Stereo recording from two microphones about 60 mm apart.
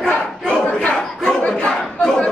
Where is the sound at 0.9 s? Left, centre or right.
Centre.